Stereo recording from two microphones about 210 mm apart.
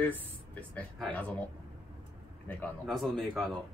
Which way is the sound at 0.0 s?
5° left (ahead or behind).